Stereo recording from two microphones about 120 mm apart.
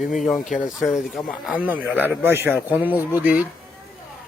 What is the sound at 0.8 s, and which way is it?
Speech, centre (ahead or behind).